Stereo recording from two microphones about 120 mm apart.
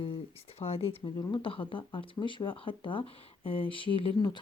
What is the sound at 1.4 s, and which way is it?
Speech, 45° left (ahead or behind).